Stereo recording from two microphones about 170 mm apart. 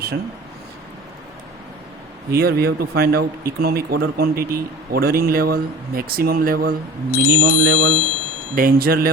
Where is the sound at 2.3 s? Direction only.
65° right (ahead or behind).